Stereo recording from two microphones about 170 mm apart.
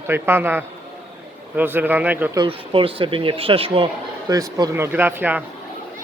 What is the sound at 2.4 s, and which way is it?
Speech, 30° right (ahead or behind).